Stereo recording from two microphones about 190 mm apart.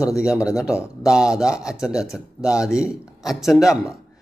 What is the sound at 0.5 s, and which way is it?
Speech, 5° right (ahead or behind).